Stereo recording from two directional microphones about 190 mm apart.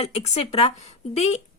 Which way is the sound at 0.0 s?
35° left (ahead or behind).